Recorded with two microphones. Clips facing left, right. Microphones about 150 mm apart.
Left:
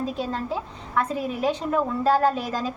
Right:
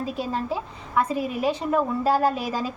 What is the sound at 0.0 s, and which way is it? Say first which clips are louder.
A woman's voice: even; 10° right (ahead or behind).